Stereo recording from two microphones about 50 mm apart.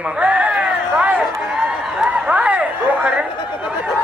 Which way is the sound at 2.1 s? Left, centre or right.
Right.